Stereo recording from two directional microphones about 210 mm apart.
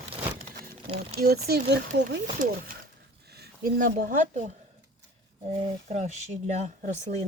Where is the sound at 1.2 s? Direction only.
50° right (ahead or behind).